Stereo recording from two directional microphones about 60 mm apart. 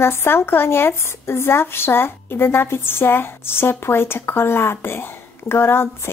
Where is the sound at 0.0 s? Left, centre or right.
Left.